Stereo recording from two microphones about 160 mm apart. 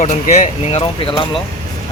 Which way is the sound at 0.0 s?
45° left (ahead or behind).